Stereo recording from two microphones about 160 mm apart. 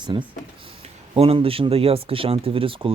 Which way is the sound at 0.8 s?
40° right (ahead or behind).